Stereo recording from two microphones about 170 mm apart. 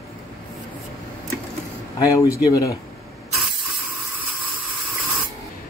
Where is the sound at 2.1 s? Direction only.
20° left (ahead or behind).